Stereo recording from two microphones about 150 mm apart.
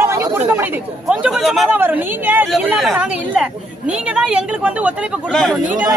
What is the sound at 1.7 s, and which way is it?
Speech, 10° right (ahead or behind).